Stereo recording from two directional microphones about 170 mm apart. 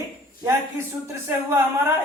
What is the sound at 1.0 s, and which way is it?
Speech, 15° right (ahead or behind).